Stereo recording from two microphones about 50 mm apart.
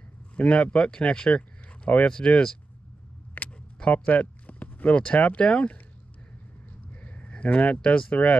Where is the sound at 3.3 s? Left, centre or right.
Left.